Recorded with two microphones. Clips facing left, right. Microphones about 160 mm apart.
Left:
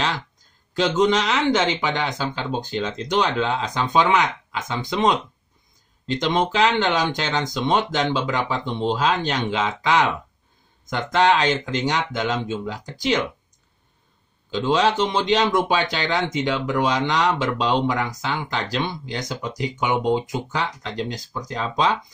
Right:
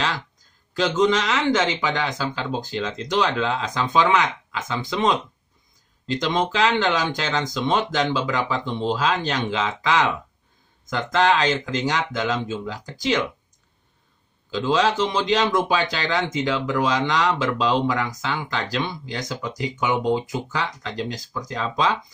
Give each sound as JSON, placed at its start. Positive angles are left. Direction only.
{"t": 0.7, "sound": "speech", "side_deg": 20}
{"t": 14.5, "sound": "speech", "side_deg": 20}